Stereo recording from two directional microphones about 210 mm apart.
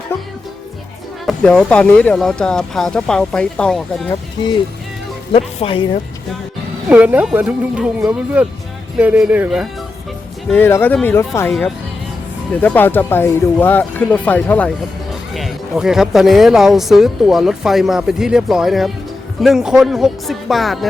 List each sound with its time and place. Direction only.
1.2 s speech: centre (ahead or behind)
5.3 s speech: 25° left (ahead or behind)
6.8 s speech: 5° right (ahead or behind)
10.5 s speech: 10° left (ahead or behind)